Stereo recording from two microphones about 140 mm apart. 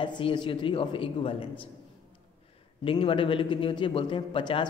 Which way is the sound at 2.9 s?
40° left (ahead or behind).